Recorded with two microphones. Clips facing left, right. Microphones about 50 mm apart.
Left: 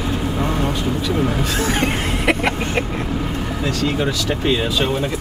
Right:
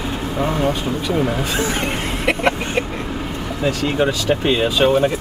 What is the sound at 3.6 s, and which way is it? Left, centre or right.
Speech, centre.